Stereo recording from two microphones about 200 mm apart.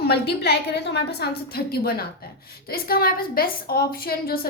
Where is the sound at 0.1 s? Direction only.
55° left (ahead or behind).